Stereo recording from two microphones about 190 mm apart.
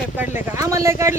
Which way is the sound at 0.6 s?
15° right (ahead or behind).